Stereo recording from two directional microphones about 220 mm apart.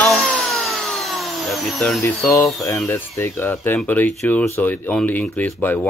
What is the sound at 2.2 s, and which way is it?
Speech, 15° left (ahead or behind).